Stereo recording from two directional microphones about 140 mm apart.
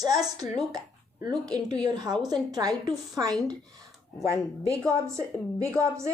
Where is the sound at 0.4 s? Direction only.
30° right (ahead or behind).